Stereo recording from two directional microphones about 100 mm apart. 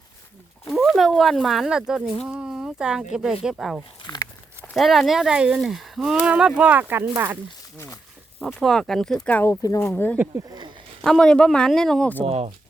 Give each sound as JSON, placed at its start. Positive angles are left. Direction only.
{"t": 0.7, "sound": "speech", "side_deg": 0}
{"t": 4.1, "sound": "a sound", "side_deg": 40}
{"t": 4.6, "sound": "speech", "side_deg": 0}
{"t": 8.4, "sound": "speech", "side_deg": 0}
{"t": 9.4, "sound": "speech", "side_deg": 30}
{"t": 9.9, "sound": "speech", "side_deg": 15}
{"t": 11.0, "sound": "speech", "side_deg": 5}
{"t": 12.2, "sound": "speech", "side_deg": -90}